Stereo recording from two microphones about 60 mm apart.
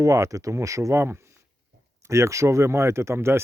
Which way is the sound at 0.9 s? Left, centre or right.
Right.